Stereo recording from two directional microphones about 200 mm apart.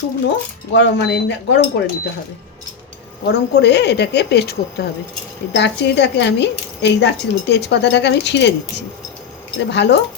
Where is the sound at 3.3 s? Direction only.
60° left (ahead or behind).